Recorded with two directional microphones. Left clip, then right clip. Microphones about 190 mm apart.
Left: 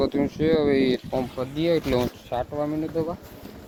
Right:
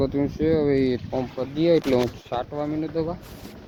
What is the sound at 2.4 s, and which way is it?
Speech, 10° right (ahead or behind).